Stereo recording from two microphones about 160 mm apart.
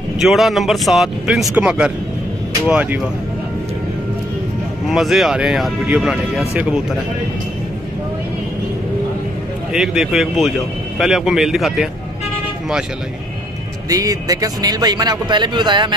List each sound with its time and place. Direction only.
0.2 s speech: centre (ahead or behind)
4.8 s speech: centre (ahead or behind)
9.7 s speech: 5° right (ahead or behind)
13.8 s speech: 20° right (ahead or behind)